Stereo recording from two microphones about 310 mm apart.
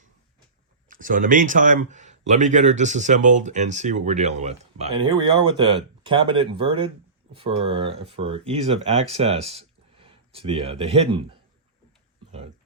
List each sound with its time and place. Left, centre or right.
0.9 s speech: right